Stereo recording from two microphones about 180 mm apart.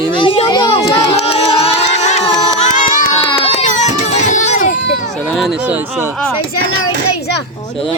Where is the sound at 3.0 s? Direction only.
25° left (ahead or behind).